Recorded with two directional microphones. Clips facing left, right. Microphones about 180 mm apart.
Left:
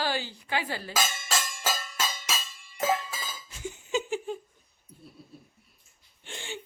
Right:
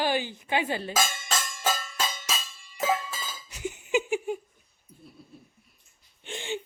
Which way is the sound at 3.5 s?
20° right (ahead or behind).